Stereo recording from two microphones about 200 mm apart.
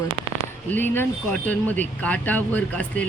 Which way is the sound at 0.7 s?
10° left (ahead or behind).